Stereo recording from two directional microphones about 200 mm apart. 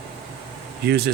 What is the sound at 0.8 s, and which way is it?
Speech, 55° right (ahead or behind).